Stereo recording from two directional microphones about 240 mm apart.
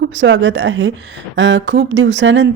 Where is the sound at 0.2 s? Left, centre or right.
Right.